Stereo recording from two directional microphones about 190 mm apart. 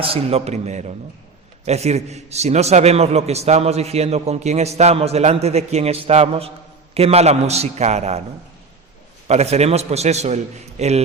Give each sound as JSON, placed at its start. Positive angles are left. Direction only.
{"t": 0.0, "sound": "a man's voice", "side_deg": -30}
{"t": 9.2, "sound": "a man's voice", "side_deg": -35}